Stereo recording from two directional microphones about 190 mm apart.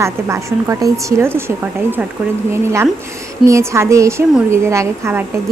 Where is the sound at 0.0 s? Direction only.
15° right (ahead or behind).